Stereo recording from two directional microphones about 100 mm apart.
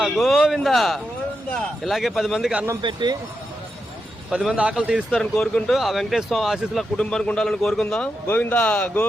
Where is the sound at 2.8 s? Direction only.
50° right (ahead or behind).